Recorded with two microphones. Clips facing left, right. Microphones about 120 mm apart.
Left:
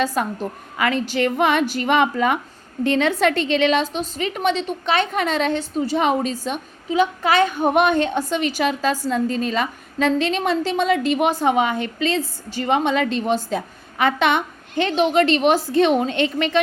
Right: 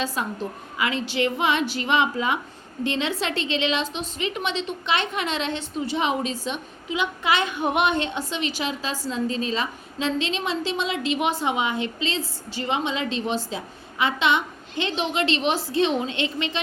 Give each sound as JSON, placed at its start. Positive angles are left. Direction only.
{"t": 0.0, "sound": "a woman's voice", "side_deg": 50}